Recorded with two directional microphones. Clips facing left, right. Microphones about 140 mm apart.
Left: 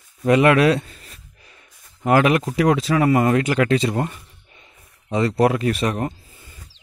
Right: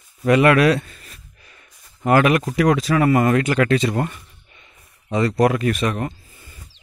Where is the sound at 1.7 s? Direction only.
10° left (ahead or behind).